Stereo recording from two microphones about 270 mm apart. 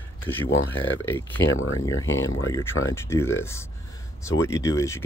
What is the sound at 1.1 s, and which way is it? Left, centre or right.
Speech, centre.